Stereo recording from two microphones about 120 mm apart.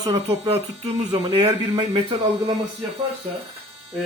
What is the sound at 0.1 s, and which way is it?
A man's voice, 60° right (ahead or behind).